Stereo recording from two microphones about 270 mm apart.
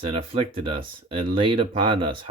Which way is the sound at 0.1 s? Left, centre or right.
Right.